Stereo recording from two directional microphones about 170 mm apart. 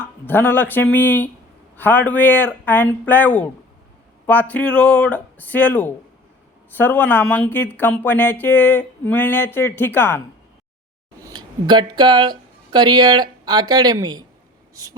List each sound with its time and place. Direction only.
0.0 s speech: 10° left (ahead or behind)
11.2 s speech: 25° right (ahead or behind)